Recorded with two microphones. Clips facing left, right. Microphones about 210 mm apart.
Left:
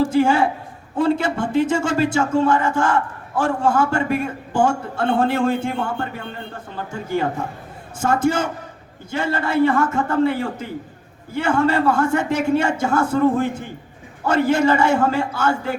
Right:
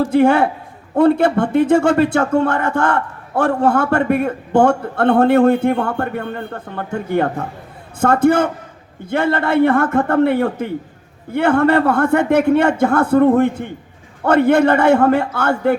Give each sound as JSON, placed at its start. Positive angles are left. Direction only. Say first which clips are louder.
{"t": 0.1, "sound": "a man's voice", "louder": "right 4 dB", "side_deg": -60}